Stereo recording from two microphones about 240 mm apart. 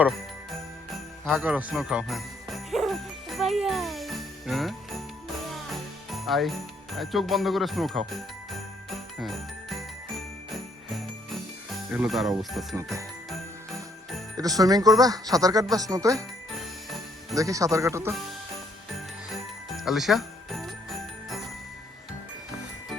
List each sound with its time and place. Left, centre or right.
1.2 s jingle bell: centre
12.7 s speech: centre
14.3 s speech: centre
17.3 s speech: centre
19.7 s jingle bell: centre